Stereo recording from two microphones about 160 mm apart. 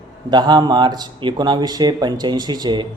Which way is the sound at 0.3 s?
25° right (ahead or behind).